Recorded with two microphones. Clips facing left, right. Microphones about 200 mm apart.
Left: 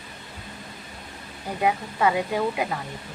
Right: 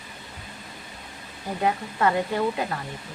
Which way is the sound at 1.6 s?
10° left (ahead or behind).